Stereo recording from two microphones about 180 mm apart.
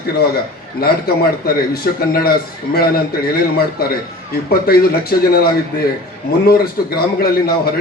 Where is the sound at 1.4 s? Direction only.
55° left (ahead or behind).